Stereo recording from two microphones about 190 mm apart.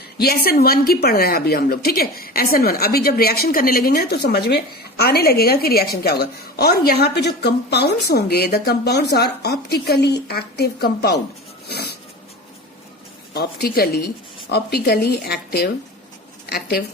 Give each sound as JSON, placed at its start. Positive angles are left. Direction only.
{"t": 0.2, "sound": "a woman's voice", "side_deg": 55}
{"t": 11.7, "sound": "a sound", "side_deg": 55}
{"t": 13.3, "sound": "a woman's voice", "side_deg": 55}